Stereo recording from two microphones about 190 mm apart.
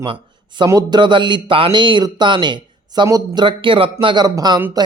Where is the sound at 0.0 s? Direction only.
25° right (ahead or behind).